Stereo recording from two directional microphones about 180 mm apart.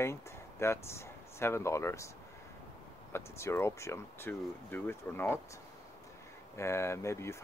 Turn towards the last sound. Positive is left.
turn(degrees=15)  # may be behind; listen again after turning